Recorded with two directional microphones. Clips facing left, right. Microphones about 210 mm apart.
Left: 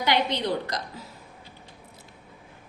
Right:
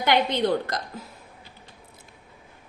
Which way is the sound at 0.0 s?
50° right (ahead or behind).